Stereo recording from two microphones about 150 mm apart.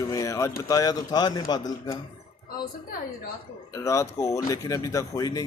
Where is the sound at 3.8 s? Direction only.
20° left (ahead or behind).